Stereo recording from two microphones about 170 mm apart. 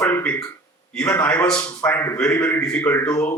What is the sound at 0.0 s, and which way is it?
A man's voice, 10° left (ahead or behind).